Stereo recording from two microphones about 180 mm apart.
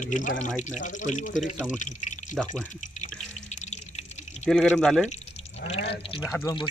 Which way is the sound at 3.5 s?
40° left (ahead or behind).